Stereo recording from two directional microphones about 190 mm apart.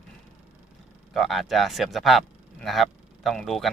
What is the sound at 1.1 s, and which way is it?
A man's voice, centre (ahead or behind).